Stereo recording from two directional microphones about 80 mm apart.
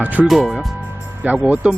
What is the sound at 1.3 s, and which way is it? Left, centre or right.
Speech, right.